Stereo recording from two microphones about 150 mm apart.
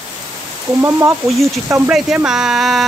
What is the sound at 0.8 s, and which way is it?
Speech, 15° right (ahead or behind).